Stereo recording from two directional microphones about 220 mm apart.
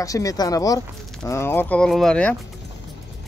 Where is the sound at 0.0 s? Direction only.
15° left (ahead or behind).